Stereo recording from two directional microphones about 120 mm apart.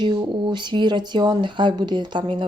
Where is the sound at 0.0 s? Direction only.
40° right (ahead or behind).